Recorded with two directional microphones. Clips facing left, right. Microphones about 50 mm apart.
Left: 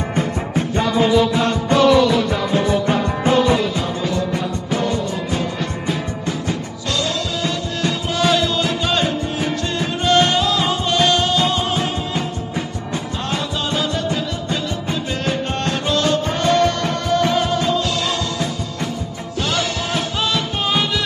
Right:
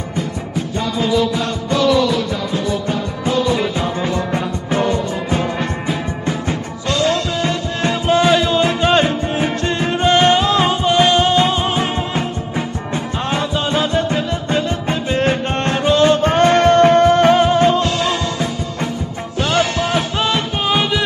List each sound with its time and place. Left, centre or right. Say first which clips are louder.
0.6 s music: left 3 dB; left
3.7 s music: right 2 dB; right
16.2 s music: right 4 dB; right
19.8 s music: right 4 dB; centre
20.5 s music: right 3 dB; centre